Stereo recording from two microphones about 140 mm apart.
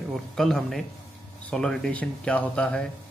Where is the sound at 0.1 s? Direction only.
Centre (ahead or behind).